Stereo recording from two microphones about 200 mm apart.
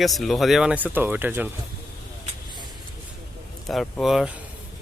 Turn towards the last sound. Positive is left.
turn(degrees=0)  # may be behind; listen again after turning